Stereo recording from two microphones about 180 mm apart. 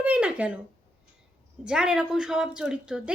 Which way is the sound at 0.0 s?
5° right (ahead or behind).